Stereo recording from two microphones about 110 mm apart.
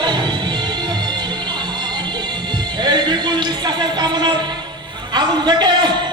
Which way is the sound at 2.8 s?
40° right (ahead or behind).